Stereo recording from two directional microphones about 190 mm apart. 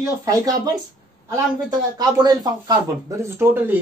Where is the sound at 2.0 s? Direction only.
20° right (ahead or behind).